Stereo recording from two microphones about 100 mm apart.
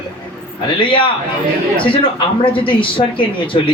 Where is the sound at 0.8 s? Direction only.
60° left (ahead or behind).